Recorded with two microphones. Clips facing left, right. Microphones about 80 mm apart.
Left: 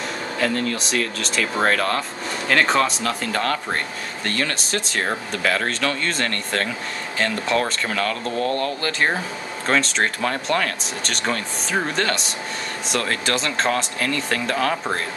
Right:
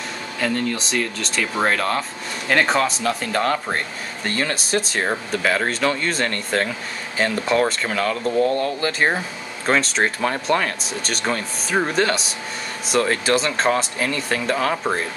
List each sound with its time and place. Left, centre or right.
0.4 s speech: centre